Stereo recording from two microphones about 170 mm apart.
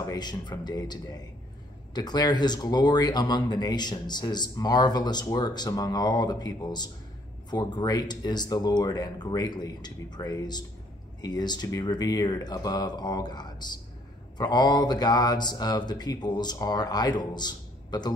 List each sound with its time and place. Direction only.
0.0 s speech: 25° left (ahead or behind)